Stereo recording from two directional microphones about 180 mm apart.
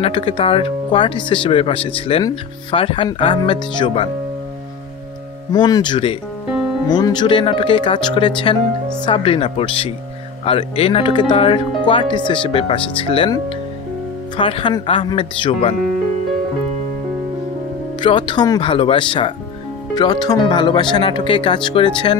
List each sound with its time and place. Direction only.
0.0 s speech: 30° left (ahead or behind)
5.5 s speech: 20° left (ahead or behind)
18.0 s speech: 25° left (ahead or behind)